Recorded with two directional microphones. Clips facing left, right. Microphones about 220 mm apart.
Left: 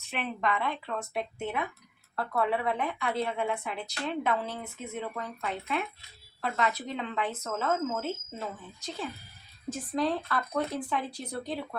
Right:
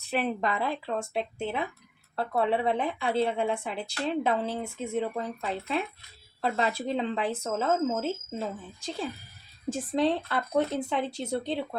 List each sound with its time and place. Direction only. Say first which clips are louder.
0.0 s speech: right 4 dB; 35° right (ahead or behind)